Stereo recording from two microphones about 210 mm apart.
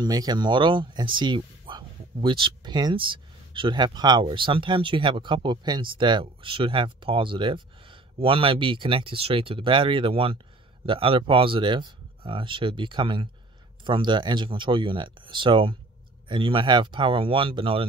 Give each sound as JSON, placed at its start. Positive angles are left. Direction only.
{"t": 0.0, "sound": "speech", "side_deg": -20}